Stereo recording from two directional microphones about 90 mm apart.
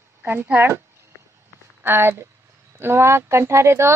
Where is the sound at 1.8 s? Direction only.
25° right (ahead or behind).